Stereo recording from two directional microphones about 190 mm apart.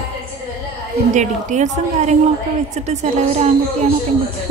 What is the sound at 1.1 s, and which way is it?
Speech, 40° right (ahead or behind).